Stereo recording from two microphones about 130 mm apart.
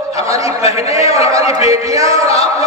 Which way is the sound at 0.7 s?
55° left (ahead or behind).